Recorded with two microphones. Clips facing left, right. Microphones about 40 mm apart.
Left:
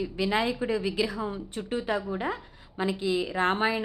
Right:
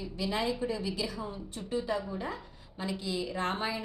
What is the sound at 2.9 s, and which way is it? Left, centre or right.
Speech, left.